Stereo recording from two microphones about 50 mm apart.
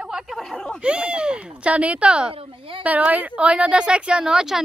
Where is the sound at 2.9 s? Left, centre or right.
Right; by 4.6 s centre.